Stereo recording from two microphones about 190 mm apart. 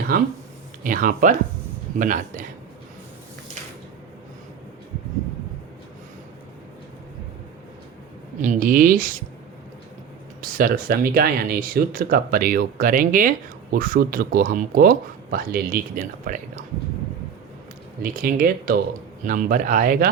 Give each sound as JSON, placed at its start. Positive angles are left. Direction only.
{"t": 0.1, "sound": "speech", "side_deg": -50}
{"t": 8.4, "sound": "speech", "side_deg": -45}
{"t": 10.4, "sound": "speech", "side_deg": -45}
{"t": 18.0, "sound": "speech", "side_deg": -45}